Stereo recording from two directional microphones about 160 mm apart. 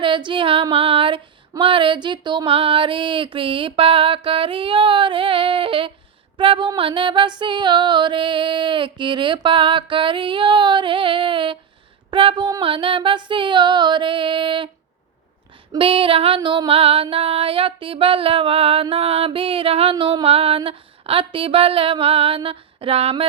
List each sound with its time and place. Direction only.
0.0 s female singing: 30° right (ahead or behind)
15.7 s female singing: 35° right (ahead or behind)